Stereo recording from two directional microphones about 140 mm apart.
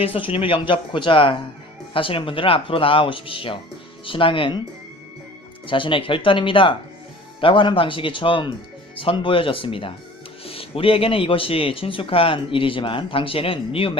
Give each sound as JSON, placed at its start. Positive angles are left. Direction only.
{"t": 0.0, "sound": "speech", "side_deg": 40}
{"t": 5.6, "sound": "speech", "side_deg": 35}